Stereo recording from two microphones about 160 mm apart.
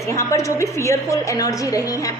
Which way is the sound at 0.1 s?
20° left (ahead or behind).